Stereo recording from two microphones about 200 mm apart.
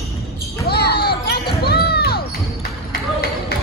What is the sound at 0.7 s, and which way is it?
Basketball bounce, 55° left (ahead or behind).